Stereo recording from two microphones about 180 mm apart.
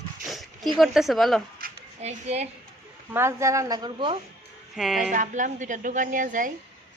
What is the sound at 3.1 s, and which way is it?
Speech, 15° right (ahead or behind).